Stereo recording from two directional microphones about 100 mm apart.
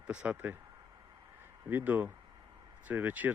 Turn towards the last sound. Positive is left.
turn(degrees=-15)  # may be behind; listen again after turning